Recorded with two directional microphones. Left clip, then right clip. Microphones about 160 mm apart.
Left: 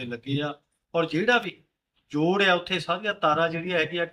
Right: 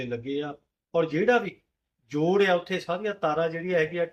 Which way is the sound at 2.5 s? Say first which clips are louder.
Left 2 dB; 5° left (ahead or behind).